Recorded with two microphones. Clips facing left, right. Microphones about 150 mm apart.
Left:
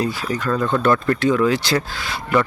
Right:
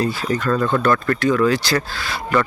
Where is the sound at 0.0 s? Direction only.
15° left (ahead or behind).